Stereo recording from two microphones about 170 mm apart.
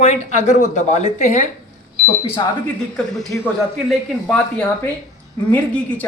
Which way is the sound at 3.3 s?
10° left (ahead or behind).